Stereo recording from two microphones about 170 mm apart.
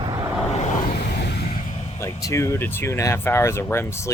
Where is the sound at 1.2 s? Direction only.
80° left.